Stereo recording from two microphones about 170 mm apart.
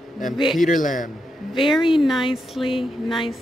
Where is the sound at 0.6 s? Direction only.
50° left (ahead or behind).